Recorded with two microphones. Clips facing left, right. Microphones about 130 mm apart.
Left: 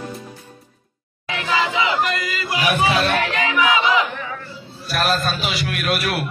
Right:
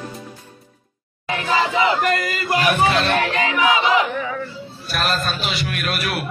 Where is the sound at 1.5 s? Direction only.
40° right (ahead or behind).